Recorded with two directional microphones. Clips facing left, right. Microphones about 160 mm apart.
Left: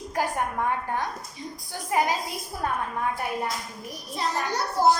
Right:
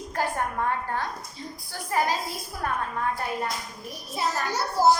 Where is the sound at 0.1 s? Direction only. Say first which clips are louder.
Left 1 dB; 15° left (ahead or behind).